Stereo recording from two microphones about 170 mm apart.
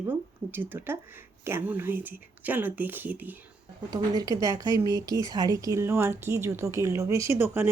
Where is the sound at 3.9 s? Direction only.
20° right (ahead or behind).